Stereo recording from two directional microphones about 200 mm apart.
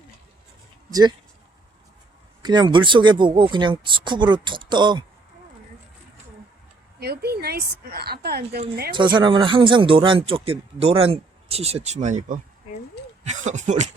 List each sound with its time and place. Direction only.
0.9 s speech: 20° right (ahead or behind)
2.4 s speech: 20° right (ahead or behind)
7.0 s speech: 50° right (ahead or behind)
9.1 s speech: 25° right (ahead or behind)